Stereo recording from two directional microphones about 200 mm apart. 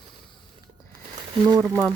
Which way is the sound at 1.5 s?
15° right (ahead or behind).